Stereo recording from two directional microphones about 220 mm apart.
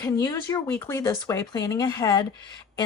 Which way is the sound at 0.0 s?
15° left (ahead or behind).